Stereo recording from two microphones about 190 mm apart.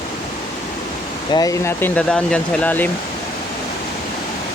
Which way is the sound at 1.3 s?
15° left (ahead or behind).